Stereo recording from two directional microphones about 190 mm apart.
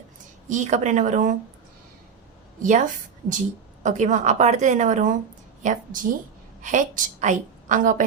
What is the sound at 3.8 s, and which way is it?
A woman's voice, 40° right (ahead or behind).